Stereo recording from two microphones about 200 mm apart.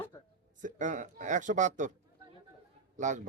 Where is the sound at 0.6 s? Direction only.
40° right (ahead or behind).